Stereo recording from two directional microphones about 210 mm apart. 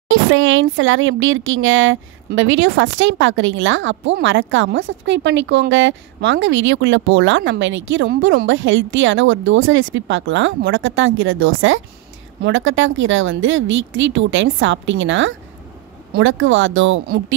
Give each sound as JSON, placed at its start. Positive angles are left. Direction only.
{"t": 0.1, "sound": "a woman's voice", "side_deg": -70}